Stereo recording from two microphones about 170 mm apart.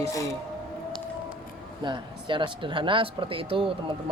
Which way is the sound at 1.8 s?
30° right (ahead or behind).